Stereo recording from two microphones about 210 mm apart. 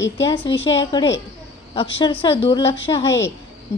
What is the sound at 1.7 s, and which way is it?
A woman's voice, 25° left (ahead or behind).